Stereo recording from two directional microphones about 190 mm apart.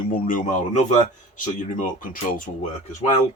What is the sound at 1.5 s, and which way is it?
Speech, 45° left (ahead or behind).